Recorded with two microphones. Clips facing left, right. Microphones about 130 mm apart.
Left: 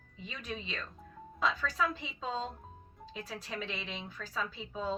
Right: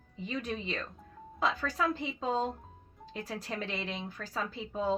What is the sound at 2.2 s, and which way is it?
A woman's voice, 55° right (ahead or behind).